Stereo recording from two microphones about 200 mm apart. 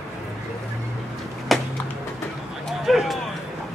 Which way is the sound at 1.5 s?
Centre (ahead or behind).